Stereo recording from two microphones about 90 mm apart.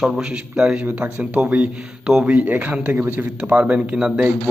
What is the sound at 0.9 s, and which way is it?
Speech, 25° right (ahead or behind).